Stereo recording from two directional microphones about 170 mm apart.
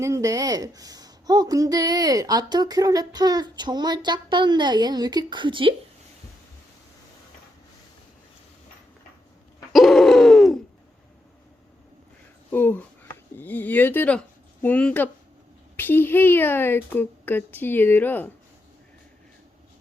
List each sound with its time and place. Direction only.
0.0 s a woman's voice: 20° right (ahead or behind)
9.7 s hoot: centre (ahead or behind)
12.5 s speech: 10° left (ahead or behind)